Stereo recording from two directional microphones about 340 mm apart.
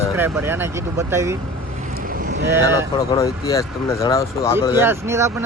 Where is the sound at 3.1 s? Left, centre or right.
Centre.